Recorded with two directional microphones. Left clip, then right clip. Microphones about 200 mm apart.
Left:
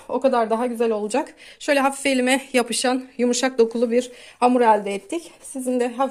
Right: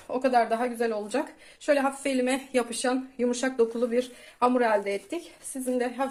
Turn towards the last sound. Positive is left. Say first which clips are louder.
# left 6 dB
turn(degrees=45)  # may be behind; listen again after turning